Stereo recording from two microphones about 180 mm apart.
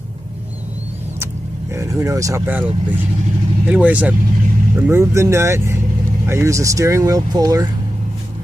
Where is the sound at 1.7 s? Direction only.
15° right (ahead or behind).